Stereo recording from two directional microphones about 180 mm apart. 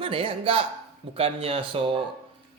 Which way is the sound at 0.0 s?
30° right (ahead or behind).